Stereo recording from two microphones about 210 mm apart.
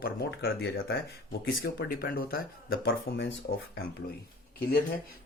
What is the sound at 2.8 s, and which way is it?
Speech, 60° left (ahead or behind).